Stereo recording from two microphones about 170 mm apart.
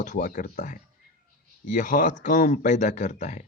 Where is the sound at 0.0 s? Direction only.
50° left (ahead or behind).